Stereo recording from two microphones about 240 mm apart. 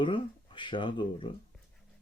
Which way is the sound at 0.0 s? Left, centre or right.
Centre.